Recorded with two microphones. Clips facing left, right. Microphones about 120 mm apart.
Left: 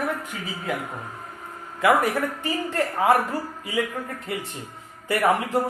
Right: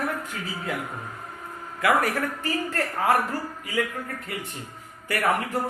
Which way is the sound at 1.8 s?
20° left (ahead or behind).